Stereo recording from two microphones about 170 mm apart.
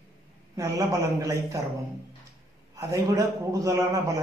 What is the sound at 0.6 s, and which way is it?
A man's voice, 20° right (ahead or behind).